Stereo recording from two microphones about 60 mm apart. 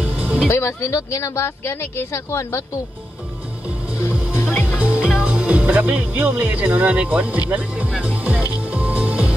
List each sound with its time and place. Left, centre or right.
0.0 s music: right
0.5 s speech: left
4.7 s music: right
5.2 s speech: right
8.6 s music: right